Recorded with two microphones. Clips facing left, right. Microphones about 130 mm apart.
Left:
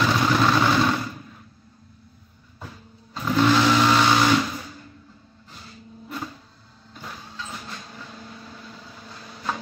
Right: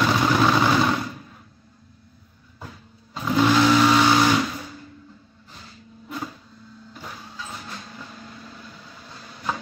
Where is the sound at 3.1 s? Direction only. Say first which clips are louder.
Even; 5° right (ahead or behind).